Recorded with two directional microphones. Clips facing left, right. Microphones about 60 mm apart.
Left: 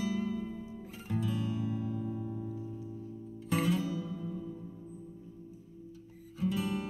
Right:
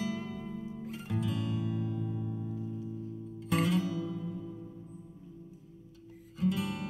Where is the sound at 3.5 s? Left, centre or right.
Right.